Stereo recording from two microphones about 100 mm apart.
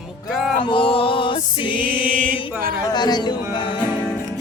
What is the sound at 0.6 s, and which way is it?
Music, 60° left (ahead or behind).